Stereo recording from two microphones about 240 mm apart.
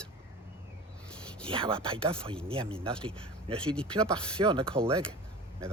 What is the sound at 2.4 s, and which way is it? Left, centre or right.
Speech, right.